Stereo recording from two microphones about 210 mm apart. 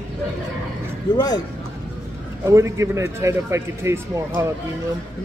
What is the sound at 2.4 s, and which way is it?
Speech, 15° right (ahead or behind).